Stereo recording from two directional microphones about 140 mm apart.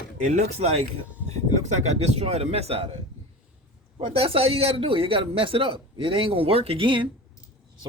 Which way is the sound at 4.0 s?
40° right (ahead or behind).